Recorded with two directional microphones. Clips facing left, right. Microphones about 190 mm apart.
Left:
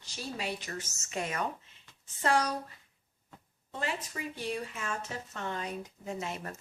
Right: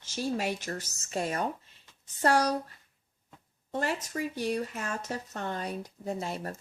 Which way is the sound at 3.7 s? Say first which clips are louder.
Right 5 dB; 45° right (ahead or behind).